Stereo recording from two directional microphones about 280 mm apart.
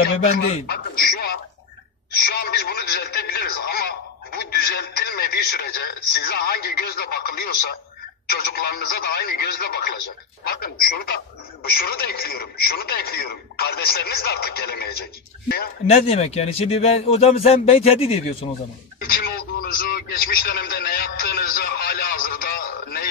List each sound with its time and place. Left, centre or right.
0.2 s a sound: left
2.1 s telephone: left
8.3 s a man's voice: left
18.9 s radio: left